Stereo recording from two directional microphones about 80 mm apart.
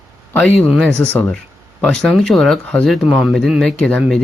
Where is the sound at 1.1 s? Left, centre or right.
Centre.